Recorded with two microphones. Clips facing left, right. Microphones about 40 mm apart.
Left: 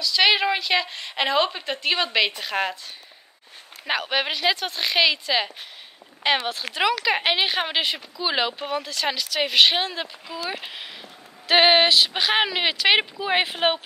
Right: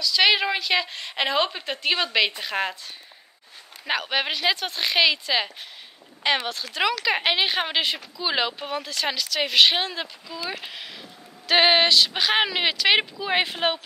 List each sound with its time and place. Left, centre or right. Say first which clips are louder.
0.0 s speech: left 1 dB; centre
3.8 s speech: left 1 dB; centre